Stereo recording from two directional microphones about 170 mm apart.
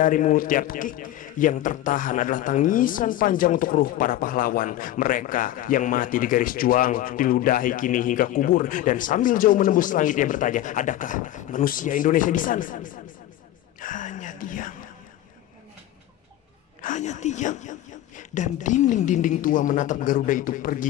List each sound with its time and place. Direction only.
0.0 s a man's voice: 50° left (ahead or behind)
13.7 s whispering: 50° left (ahead or behind)
16.8 s a man's voice: 45° left (ahead or behind)